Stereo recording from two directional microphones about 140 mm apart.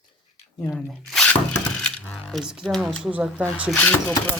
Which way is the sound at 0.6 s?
15° left (ahead or behind).